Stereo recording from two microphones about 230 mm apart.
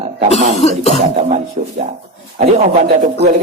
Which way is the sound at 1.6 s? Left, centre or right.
Right.